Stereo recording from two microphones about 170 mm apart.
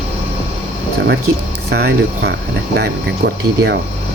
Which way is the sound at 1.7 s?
70° right (ahead or behind).